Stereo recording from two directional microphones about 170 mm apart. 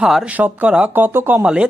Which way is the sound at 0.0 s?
5° right (ahead or behind).